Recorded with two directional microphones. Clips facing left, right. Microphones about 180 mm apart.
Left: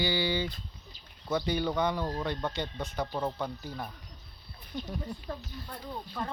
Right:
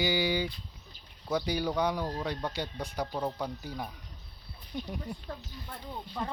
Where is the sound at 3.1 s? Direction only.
Centre (ahead or behind).